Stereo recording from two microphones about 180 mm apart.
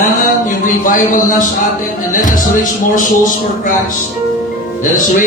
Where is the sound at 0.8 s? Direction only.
50° left (ahead or behind).